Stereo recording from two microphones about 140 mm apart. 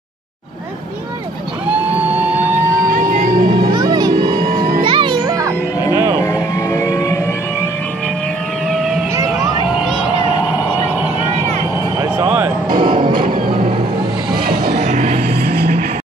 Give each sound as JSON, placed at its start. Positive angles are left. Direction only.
{"t": 2.0, "sound": "vehicle", "side_deg": -10}
{"t": 2.5, "sound": "music", "side_deg": -75}
{"t": 3.5, "sound": "music", "side_deg": -30}
{"t": 6.1, "sound": "vehicle", "side_deg": 25}
{"t": 8.6, "sound": "a sound", "side_deg": 0}
{"t": 12.8, "sound": "music", "side_deg": -35}
{"t": 13.1, "sound": "music", "side_deg": -90}
{"t": 13.5, "sound": "music", "side_deg": -40}
{"t": 14.3, "sound": "music", "side_deg": -90}
{"t": 14.8, "sound": "vehicle", "side_deg": -55}